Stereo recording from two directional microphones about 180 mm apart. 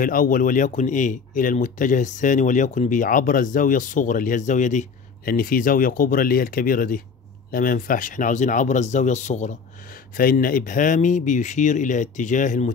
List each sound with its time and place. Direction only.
0.0 s speech: 50° left (ahead or behind)